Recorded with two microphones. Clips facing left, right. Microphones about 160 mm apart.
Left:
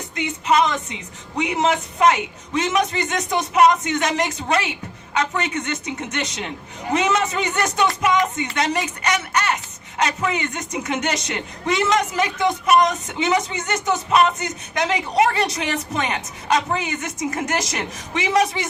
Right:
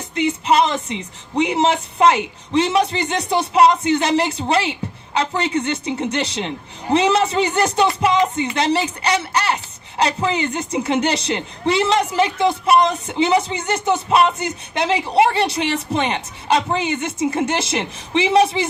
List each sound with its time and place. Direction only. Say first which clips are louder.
0.1 s a woman's voice: right 3 dB; 25° right (ahead or behind)